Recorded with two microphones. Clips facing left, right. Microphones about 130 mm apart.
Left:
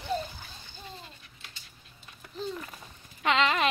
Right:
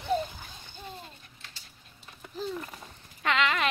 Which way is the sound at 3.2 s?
25° left (ahead or behind).